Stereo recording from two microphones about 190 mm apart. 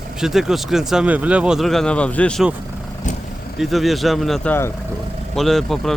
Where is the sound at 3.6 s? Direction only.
Centre (ahead or behind).